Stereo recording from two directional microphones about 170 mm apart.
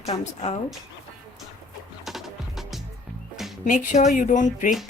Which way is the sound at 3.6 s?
50° left (ahead or behind).